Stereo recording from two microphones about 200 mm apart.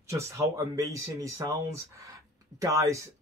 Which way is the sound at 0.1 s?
15° right (ahead or behind).